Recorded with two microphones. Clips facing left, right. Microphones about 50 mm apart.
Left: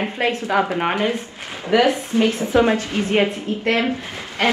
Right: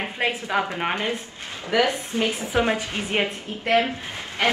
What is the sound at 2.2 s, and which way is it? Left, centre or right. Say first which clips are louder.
Speech: left 4 dB; left.